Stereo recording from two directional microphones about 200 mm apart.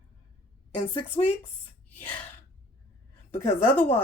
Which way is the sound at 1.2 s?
20° left (ahead or behind).